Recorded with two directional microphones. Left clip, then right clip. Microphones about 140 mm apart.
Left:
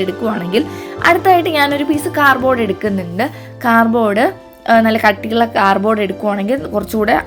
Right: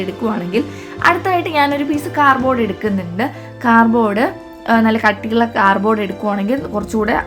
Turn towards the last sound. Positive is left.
turn(degrees=30)  # may be behind; listen again after turning